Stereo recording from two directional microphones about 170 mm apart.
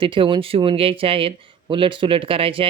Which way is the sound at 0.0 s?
30° right (ahead or behind).